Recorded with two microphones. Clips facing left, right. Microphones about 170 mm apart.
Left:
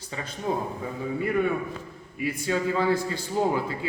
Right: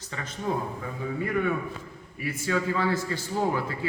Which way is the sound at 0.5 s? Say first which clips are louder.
Left 1 dB; 25° left (ahead or behind).